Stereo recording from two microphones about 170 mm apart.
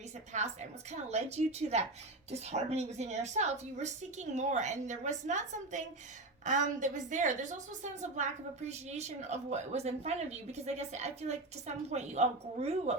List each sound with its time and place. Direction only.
0.3 s a woman's voice: 40° right (ahead or behind)